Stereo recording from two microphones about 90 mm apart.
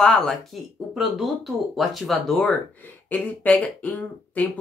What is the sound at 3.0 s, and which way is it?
Speech, 20° left (ahead or behind).